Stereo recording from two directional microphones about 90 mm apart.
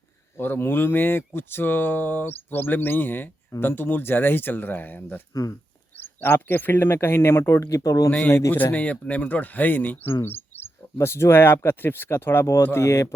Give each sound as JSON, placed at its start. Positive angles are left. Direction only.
{"t": 0.3, "sound": "speech", "side_deg": 25}
{"t": 5.3, "sound": "speech", "side_deg": 40}
{"t": 6.0, "sound": "speech", "side_deg": 25}
{"t": 8.5, "sound": "speech", "side_deg": 20}